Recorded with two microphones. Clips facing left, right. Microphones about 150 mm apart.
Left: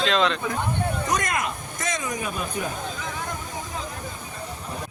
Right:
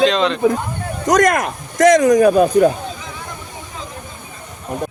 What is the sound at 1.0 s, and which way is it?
Speech, 85° right.